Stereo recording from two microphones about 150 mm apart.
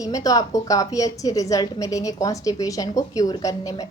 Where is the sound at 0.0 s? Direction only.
25° left (ahead or behind).